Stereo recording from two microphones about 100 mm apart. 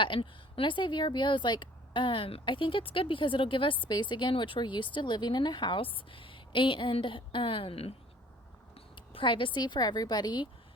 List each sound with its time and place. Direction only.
0.0 s speech: 60° left (ahead or behind)
9.0 s speech: 55° left (ahead or behind)